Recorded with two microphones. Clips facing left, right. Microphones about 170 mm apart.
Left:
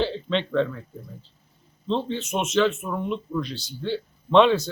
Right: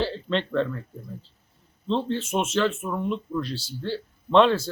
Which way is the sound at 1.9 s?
Centre (ahead or behind).